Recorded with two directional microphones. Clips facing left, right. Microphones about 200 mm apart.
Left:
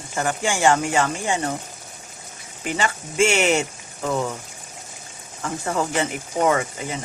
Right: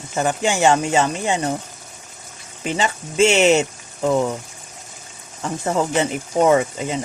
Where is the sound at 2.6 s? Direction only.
25° right (ahead or behind).